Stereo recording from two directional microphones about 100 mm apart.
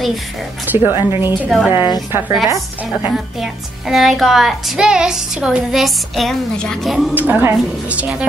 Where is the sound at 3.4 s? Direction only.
5° right (ahead or behind).